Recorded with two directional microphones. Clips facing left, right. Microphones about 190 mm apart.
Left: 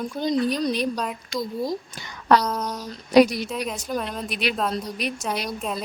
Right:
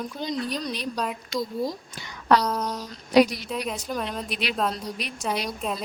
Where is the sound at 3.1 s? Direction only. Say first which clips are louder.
Left 3 dB; 45° left (ahead or behind).